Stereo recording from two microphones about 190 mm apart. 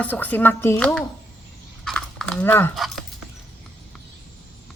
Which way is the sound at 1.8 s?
5° left (ahead or behind).